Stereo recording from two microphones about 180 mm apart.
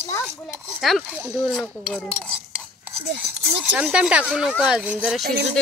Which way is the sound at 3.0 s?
70° right (ahead or behind).